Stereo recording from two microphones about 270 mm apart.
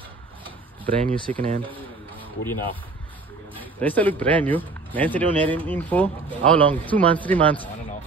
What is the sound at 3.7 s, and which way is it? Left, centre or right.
Speech, centre.